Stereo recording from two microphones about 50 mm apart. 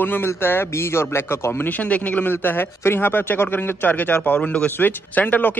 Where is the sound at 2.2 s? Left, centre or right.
Left.